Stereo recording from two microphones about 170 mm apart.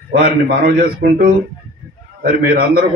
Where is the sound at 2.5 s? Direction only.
65° right (ahead or behind).